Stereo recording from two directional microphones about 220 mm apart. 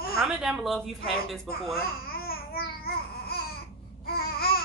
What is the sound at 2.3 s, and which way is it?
Babbling, 45° left (ahead or behind).